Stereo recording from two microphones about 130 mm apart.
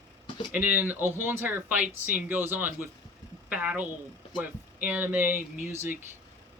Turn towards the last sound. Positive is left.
turn(degrees=-20)  # may be behind; listen again after turning